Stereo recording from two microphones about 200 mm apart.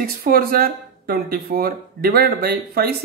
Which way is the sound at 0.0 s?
45° right (ahead or behind).